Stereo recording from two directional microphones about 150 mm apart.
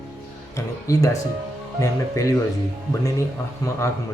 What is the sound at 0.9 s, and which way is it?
Speech, 20° left (ahead or behind).